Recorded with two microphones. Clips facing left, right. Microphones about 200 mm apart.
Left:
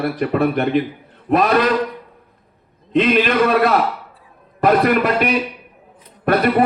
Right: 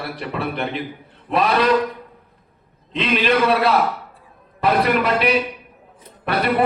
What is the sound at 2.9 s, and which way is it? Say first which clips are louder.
Speech: left 4 dB; 45° left (ahead or behind).